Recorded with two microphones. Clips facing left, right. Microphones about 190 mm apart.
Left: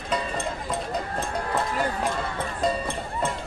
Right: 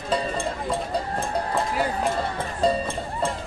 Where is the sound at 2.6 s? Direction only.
30° right (ahead or behind).